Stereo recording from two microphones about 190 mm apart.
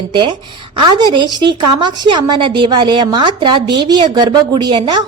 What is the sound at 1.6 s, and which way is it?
A woman's voice, 25° right (ahead or behind).